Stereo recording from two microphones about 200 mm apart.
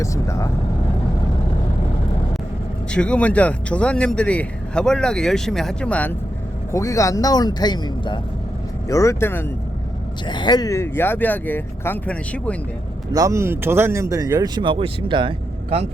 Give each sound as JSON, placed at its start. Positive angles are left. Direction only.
{"t": 0.0, "sound": "speech", "side_deg": 15}
{"t": 2.9, "sound": "speech", "side_deg": 5}
{"t": 10.2, "sound": "speech", "side_deg": 20}
{"t": 13.1, "sound": "speech", "side_deg": -15}